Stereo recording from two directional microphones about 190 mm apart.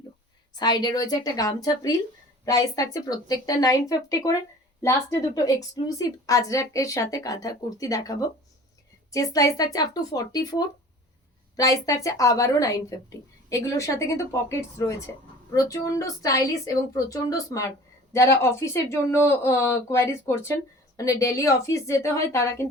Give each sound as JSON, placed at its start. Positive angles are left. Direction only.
{"t": 0.5, "sound": "speech", "side_deg": 20}
{"t": 15.5, "sound": "speech", "side_deg": 15}